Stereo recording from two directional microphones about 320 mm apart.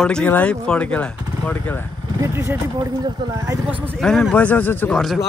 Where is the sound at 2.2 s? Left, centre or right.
Centre.